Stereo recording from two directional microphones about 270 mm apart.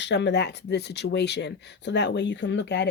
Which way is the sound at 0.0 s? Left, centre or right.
Left.